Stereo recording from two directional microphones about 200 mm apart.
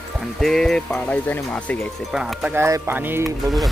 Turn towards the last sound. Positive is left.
turn(degrees=-10)  # may be behind; listen again after turning